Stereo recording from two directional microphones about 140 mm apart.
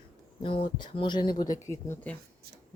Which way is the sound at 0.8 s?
35° left (ahead or behind).